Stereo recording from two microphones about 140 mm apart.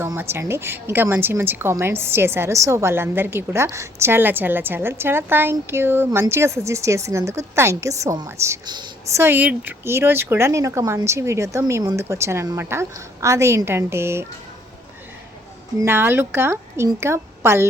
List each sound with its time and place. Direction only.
0.0 s a woman's voice: 15° right (ahead or behind)
9.1 s a woman's voice: 15° right (ahead or behind)
15.8 s a woman's voice: 15° right (ahead or behind)